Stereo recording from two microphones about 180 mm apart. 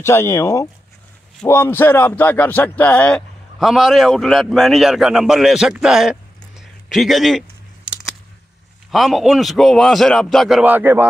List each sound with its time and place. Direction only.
0.0 s a man's voice: 15° left (ahead or behind)
8.9 s a man's voice: centre (ahead or behind)